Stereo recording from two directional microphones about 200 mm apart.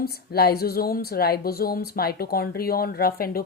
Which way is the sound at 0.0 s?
50° left (ahead or behind).